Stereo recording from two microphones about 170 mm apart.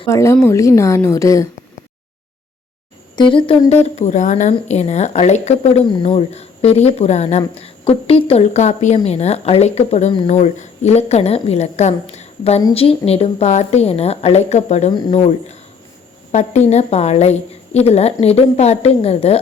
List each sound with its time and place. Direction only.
0.1 s a woman's voice: 15° left (ahead or behind)
3.2 s speech: 30° left (ahead or behind)